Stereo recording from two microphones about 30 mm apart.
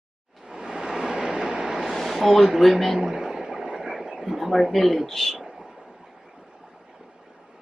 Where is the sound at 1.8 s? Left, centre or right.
Centre.